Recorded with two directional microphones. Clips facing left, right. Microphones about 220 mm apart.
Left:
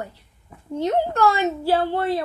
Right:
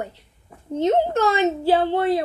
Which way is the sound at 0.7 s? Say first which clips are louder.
Right 2 dB; 20° right (ahead or behind).